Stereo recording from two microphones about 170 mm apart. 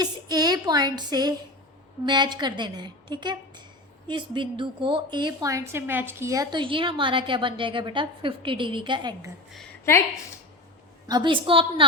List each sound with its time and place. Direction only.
0.0 s a woman's voice: 25° right (ahead or behind)
11.1 s a woman's voice: 30° right (ahead or behind)